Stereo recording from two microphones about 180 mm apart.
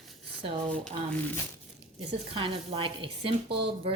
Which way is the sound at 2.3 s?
30° right (ahead or behind).